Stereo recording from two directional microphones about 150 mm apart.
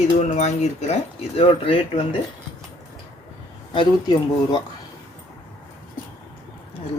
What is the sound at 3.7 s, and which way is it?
Speech, 30° left (ahead or behind).